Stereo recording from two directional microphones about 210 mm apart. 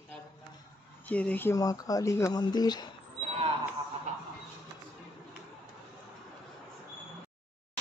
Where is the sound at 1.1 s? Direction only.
5° left (ahead or behind).